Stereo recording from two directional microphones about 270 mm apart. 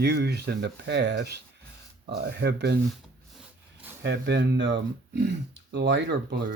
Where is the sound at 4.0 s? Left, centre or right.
Right.